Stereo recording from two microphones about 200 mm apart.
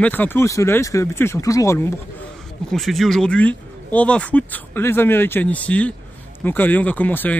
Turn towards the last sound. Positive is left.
turn(degrees=10)  # may be behind; listen again after turning